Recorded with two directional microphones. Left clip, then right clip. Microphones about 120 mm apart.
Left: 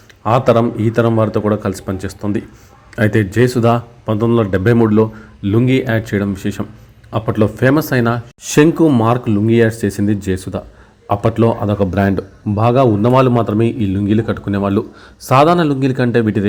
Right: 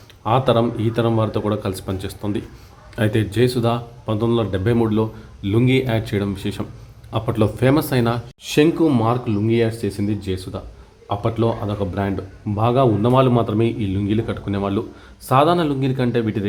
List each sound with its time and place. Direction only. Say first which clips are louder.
0.2 s a man's voice: left 5 dB; 40° left (ahead or behind)
3.3 s speech: left 6 dB; 40° left (ahead or behind)
4.0 s a man's voice: left 4 dB; 30° left (ahead or behind); by 12.2 s 70° left (ahead or behind)
12.5 s a man's voice: left 5 dB; 35° left (ahead or behind)